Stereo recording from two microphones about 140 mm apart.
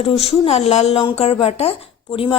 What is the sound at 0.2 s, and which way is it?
A woman's voice, 50° left (ahead or behind).